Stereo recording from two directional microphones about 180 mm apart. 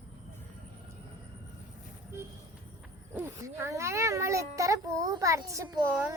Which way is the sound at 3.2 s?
15° right (ahead or behind).